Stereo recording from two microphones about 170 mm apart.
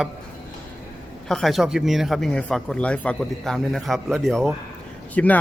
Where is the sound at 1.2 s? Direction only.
Centre (ahead or behind).